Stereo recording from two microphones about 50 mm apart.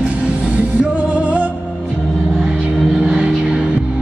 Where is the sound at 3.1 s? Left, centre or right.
Centre.